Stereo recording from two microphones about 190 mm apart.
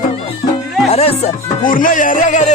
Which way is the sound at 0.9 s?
35° left (ahead or behind).